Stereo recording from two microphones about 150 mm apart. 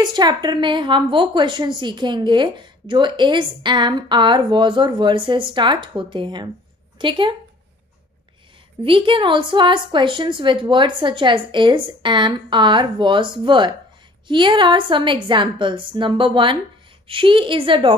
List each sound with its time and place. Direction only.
0.0 s a woman's voice: 30° right (ahead or behind)
8.8 s a woman's voice: 35° right (ahead or behind)